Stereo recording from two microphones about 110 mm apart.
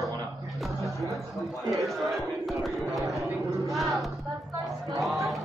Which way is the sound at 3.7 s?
Centre (ahead or behind).